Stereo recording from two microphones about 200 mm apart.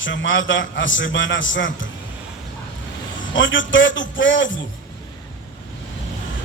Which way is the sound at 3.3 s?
70° left (ahead or behind).